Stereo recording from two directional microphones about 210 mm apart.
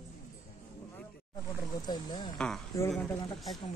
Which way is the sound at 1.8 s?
20° left (ahead or behind).